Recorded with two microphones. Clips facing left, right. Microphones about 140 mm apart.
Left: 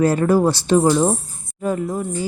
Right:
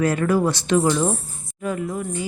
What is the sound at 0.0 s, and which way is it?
Speech, 35° left (ahead or behind).